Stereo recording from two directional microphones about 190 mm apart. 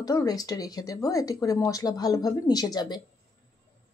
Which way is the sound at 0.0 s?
20° left (ahead or behind).